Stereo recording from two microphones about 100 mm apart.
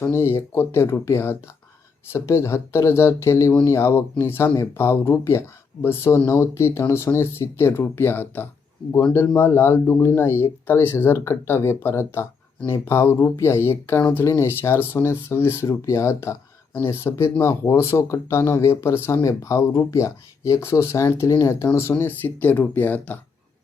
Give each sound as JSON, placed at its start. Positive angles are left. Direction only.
{"t": 0.0, "sound": "speech", "side_deg": 25}